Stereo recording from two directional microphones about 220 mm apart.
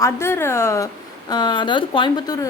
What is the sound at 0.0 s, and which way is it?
Speech, 10° left (ahead or behind).